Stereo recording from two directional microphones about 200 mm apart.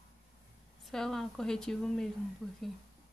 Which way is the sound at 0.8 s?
Centre (ahead or behind).